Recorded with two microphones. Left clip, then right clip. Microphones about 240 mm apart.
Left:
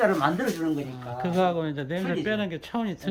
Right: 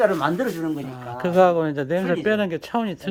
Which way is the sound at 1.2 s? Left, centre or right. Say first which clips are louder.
Right 8 dB; centre.